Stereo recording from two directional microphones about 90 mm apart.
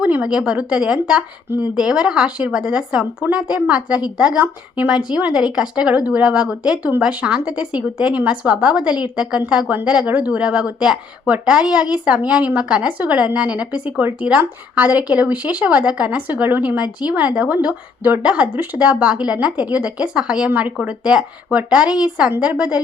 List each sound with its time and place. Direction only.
0.0 s speech: 15° right (ahead or behind)